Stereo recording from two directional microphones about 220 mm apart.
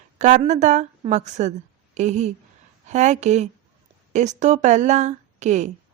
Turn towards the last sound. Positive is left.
turn(degrees=-30)  # may be behind; listen again after turning